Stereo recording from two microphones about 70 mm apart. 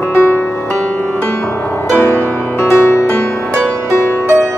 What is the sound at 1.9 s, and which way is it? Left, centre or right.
Music, left.